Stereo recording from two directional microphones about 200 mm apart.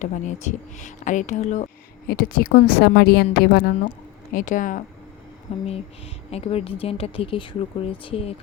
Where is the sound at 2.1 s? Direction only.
45° left (ahead or behind).